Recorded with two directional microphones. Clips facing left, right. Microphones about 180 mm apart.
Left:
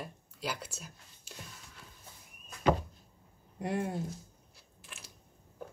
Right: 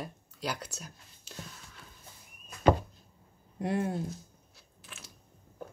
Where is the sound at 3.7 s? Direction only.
Centre (ahead or behind).